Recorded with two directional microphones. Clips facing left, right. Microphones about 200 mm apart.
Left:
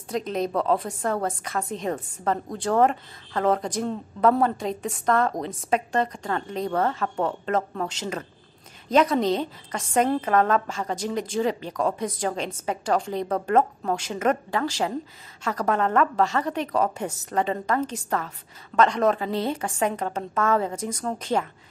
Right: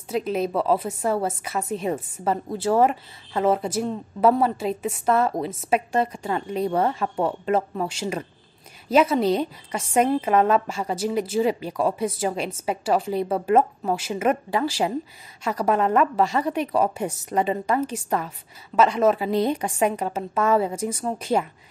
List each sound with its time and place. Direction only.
0.1 s a woman's voice: 5° right (ahead or behind)